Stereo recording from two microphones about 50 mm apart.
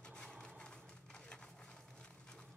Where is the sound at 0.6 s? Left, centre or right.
Centre.